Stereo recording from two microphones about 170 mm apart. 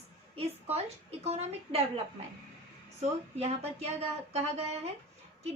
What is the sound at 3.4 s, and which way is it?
A woman's voice, 40° right (ahead or behind).